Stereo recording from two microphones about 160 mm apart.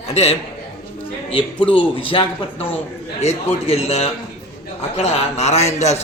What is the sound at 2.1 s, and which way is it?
A man's voice, 30° left (ahead or behind).